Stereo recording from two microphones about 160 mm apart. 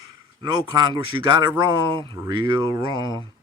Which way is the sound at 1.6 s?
30° right (ahead or behind).